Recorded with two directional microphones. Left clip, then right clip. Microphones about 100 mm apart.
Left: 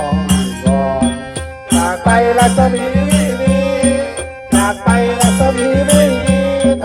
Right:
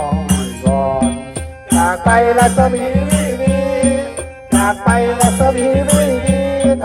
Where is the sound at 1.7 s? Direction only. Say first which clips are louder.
Right 1 dB; 5° right (ahead or behind).